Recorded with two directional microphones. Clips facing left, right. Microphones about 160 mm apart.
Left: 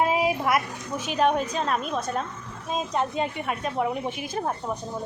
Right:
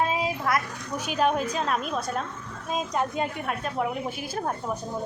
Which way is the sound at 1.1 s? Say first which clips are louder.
Left 1 dB; centre (ahead or behind).